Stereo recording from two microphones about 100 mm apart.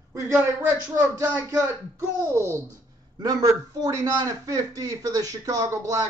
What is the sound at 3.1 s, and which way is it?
A man's voice, 40° right (ahead or behind).